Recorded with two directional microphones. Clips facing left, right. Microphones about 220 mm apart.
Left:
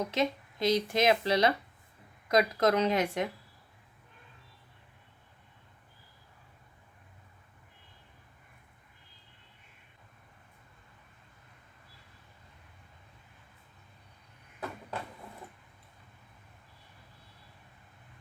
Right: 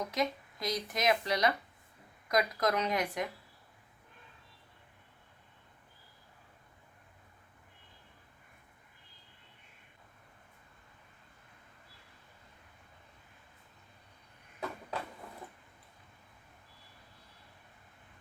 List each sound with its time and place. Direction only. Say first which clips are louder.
0.0 s speech: left 3 dB; 25° left (ahead or behind)